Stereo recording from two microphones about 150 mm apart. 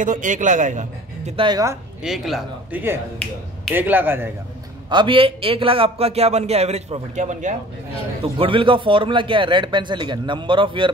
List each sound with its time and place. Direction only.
0.0 s a man's voice: 60° right (ahead or behind)
1.3 s speech: 30° right (ahead or behind)
2.0 s a man's voice: centre (ahead or behind)
3.7 s speech: 15° right (ahead or behind)
4.8 s a man's voice: 35° right (ahead or behind); by 7.5 s 55° right (ahead or behind)
8.2 s a man's voice: 35° right (ahead or behind)